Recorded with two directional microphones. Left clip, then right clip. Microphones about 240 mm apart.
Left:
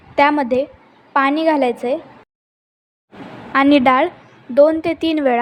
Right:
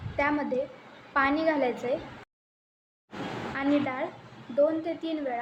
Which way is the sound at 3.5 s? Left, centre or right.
Left.